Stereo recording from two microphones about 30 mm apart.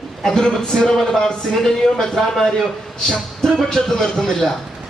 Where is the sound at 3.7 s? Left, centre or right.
Centre.